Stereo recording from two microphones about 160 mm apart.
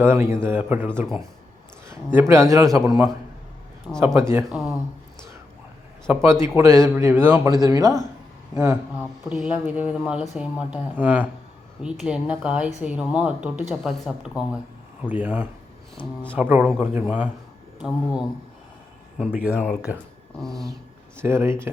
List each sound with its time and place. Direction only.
0.0 s speech: 15° right (ahead or behind)
2.1 s speech: 15° right (ahead or behind)
4.5 s speech: centre (ahead or behind)
6.2 s speech: 15° right (ahead or behind)
9.3 s speech: centre (ahead or behind)
16.0 s speech: 10° left (ahead or behind)
16.3 s speech: 10° right (ahead or behind)
19.2 s speech: 5° right (ahead or behind)
20.4 s speech: centre (ahead or behind)
21.2 s speech: 15° right (ahead or behind)